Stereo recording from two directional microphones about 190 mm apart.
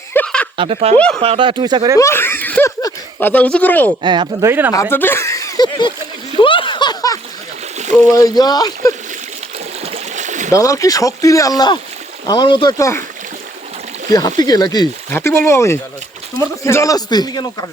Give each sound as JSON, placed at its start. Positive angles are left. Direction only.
{"t": 0.1, "sound": "a sound", "side_deg": 5}
{"t": 0.5, "sound": "speech", "side_deg": -30}
{"t": 0.9, "sound": "speech", "side_deg": 5}
{"t": 1.2, "sound": "speech", "side_deg": -30}
{"t": 2.0, "sound": "speech", "side_deg": 15}
{"t": 4.0, "sound": "speech", "side_deg": -25}
{"t": 4.7, "sound": "speech", "side_deg": 15}
{"t": 6.4, "sound": "a sound", "side_deg": 25}
{"t": 8.1, "sound": "speech", "side_deg": 20}
{"t": 9.8, "sound": "a sound", "side_deg": -35}
{"t": 10.5, "sound": "speech", "side_deg": 15}
{"t": 14.1, "sound": "speech", "side_deg": 20}